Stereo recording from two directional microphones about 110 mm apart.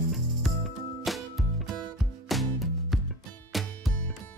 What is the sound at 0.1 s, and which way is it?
Music, centre (ahead or behind).